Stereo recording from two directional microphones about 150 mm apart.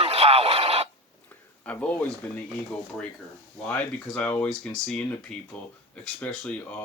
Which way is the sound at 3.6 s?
10° left (ahead or behind).